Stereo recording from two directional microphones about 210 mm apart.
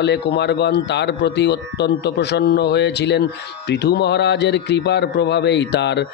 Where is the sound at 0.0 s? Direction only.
55° left (ahead or behind).